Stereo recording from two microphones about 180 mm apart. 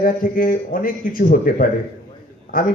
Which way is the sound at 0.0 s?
50° left (ahead or behind).